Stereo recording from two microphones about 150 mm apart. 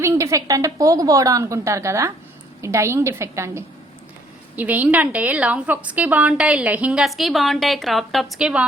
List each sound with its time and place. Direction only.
0.0 s a woman's voice: 20° right (ahead or behind)